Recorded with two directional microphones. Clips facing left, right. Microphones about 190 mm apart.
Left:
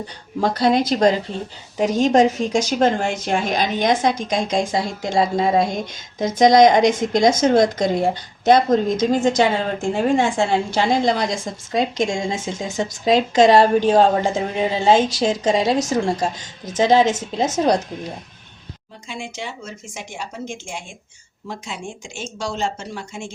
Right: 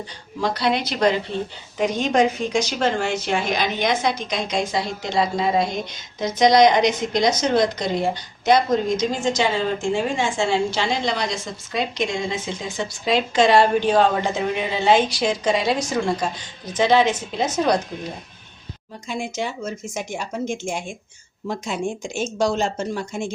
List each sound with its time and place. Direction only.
0.3 s a woman's voice: 50° left (ahead or behind)
19.0 s speech: 40° right (ahead or behind)